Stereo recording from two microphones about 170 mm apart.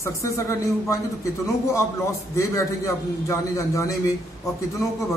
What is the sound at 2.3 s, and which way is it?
A man's voice, 15° left (ahead or behind).